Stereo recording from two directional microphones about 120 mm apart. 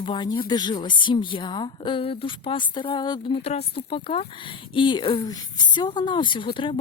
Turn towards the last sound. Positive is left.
turn(degrees=45)  # may be behind; listen again after turning